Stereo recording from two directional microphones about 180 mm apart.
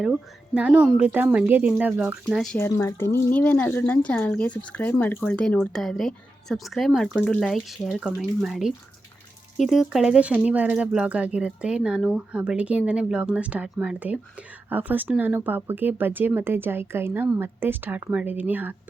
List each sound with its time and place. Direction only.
0.0 s speech: 5° right (ahead or behind)
2.6 s speech: 15° left (ahead or behind); by 18.8 s 10° right (ahead or behind)